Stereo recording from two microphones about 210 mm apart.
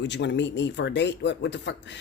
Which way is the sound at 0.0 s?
55° left (ahead or behind).